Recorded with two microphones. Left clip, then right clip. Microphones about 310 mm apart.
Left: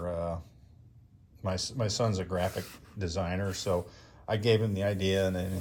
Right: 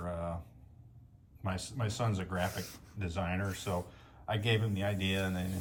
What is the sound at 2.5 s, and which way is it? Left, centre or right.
Speech, centre.